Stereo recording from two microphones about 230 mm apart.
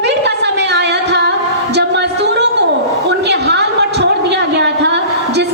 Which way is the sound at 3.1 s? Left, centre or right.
Right.